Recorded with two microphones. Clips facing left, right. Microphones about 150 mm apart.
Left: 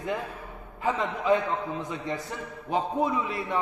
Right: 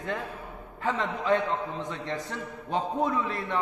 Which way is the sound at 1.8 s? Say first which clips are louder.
Left 1 dB; 10° left (ahead or behind).